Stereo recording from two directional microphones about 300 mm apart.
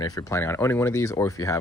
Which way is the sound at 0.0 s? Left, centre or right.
Centre.